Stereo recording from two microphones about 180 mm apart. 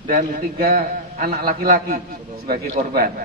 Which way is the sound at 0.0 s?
55° right (ahead or behind).